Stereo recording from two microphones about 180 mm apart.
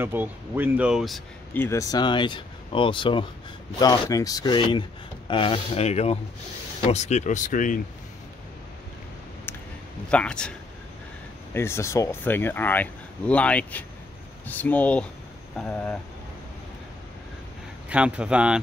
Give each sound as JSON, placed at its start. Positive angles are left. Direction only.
{"t": 0.0, "sound": "speech", "side_deg": -10}
{"t": 1.5, "sound": "speech", "side_deg": 15}
{"t": 10.1, "sound": "speech", "side_deg": 5}
{"t": 11.5, "sound": "speech", "side_deg": 15}
{"t": 17.8, "sound": "speech", "side_deg": -5}